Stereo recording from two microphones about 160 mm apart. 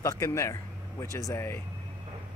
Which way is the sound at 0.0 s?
20° left (ahead or behind).